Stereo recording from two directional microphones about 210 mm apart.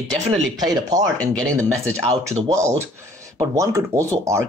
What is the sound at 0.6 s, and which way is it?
Speech, 20° right (ahead or behind).